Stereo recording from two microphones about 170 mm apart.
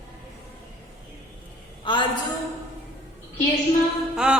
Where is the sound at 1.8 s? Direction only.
30° left (ahead or behind).